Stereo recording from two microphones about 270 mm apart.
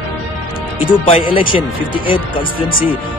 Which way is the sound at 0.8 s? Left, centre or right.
Centre.